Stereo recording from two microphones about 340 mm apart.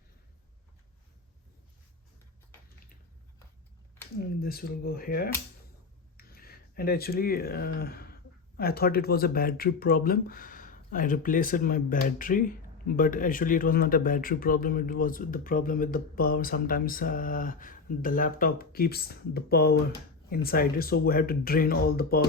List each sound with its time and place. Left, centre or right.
4.2 s speech: left